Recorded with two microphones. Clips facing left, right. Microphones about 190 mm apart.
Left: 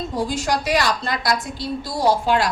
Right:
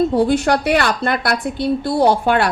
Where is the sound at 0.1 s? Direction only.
60° right (ahead or behind).